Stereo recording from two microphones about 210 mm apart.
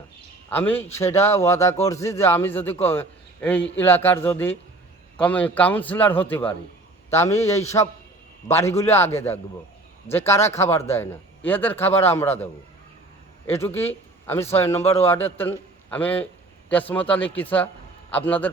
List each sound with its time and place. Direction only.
0.5 s a man's voice: 10° left (ahead or behind)
10.1 s a man's voice: 10° left (ahead or behind)
13.5 s a man's voice: 10° left (ahead or behind)
14.8 s a man's voice: 30° left (ahead or behind)
15.0 s a man's voice: 10° left (ahead or behind)